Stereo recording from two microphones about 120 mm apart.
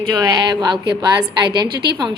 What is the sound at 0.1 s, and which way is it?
A woman's voice, 30° right (ahead or behind).